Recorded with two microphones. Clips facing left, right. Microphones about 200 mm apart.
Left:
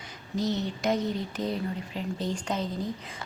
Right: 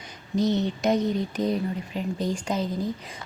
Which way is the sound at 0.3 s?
20° right (ahead or behind).